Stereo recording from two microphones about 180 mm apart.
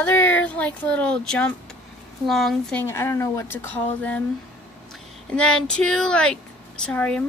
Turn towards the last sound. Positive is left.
turn(degrees=5)  # may be behind; listen again after turning